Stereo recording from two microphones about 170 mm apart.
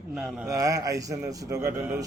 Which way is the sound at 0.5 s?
20° right (ahead or behind).